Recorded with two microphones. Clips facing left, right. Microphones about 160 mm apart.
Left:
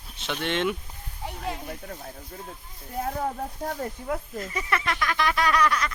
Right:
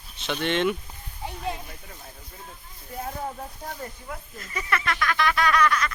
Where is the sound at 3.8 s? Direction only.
70° left (ahead or behind).